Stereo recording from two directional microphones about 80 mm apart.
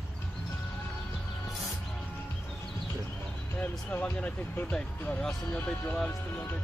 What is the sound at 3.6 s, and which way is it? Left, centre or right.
Speech, left.